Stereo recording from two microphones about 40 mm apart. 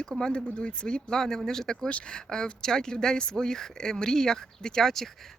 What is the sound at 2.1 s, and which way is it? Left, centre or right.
Speech, centre.